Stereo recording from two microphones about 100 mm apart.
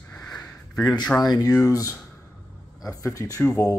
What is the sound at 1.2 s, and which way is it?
Speech, 40° left (ahead or behind).